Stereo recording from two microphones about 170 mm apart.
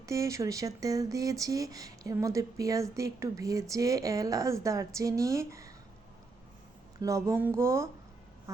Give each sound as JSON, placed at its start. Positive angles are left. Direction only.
{"t": 0.0, "sound": "speech", "side_deg": -20}
{"t": 7.0, "sound": "speech", "side_deg": -20}